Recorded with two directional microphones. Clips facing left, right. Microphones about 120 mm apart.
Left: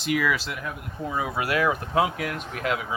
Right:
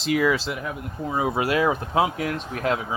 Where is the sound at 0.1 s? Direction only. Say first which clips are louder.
Right 4 dB; 30° right (ahead or behind).